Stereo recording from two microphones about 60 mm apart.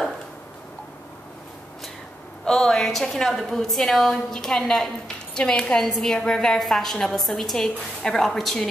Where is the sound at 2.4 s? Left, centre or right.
Centre.